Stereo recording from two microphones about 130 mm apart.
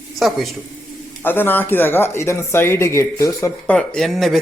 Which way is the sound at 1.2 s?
15° left (ahead or behind).